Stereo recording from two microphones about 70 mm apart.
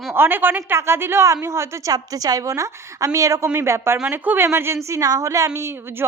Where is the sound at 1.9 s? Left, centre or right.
Right.